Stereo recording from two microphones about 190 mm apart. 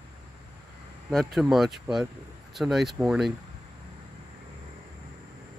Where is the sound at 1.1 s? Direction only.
Centre (ahead or behind).